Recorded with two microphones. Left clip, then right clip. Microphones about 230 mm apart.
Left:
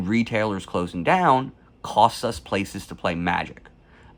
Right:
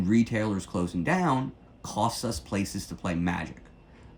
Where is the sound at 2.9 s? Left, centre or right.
Centre.